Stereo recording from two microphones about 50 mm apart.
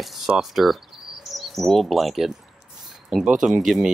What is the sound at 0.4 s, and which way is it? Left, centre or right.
Chirp, centre.